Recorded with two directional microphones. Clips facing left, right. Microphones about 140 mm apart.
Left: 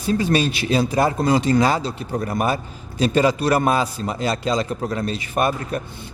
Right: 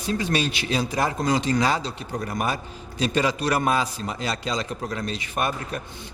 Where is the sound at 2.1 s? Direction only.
35° left (ahead or behind).